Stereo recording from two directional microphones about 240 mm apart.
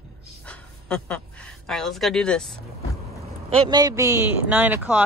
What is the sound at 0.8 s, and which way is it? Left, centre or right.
Speech, centre.